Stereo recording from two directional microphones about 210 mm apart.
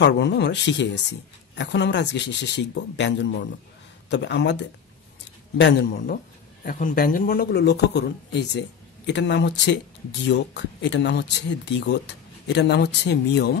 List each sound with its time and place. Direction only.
0.0 s speech: 55° left (ahead or behind)